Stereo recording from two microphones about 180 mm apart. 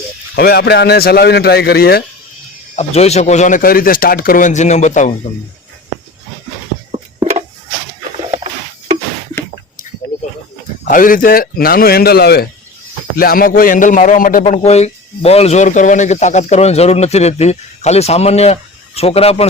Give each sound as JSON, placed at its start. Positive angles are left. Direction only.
{"t": 0.3, "sound": "a man's voice", "side_deg": 60}
{"t": 2.7, "sound": "speech", "side_deg": 35}
{"t": 10.8, "sound": "a man's voice", "side_deg": 50}